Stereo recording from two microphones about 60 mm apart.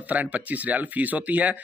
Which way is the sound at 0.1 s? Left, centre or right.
Right.